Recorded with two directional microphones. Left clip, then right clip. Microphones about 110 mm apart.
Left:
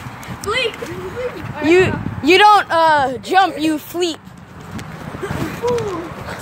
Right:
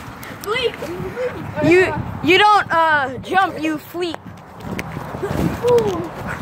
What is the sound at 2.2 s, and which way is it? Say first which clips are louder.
Speech: left 3 dB; 45° left (ahead or behind).